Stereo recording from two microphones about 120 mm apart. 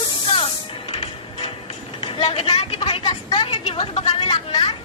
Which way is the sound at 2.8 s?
50° left (ahead or behind).